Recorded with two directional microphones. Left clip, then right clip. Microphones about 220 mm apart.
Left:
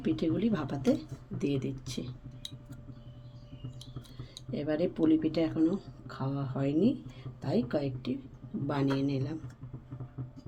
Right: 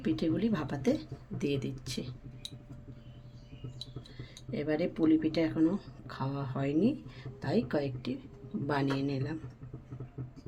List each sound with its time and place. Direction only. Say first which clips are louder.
0.0 s speech: left 1 dB; 10° right (ahead or behind)
4.5 s speech: left 1 dB; 10° right (ahead or behind)